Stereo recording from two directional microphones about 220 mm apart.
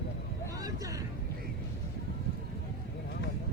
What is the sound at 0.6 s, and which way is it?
Speech, 15° right (ahead or behind).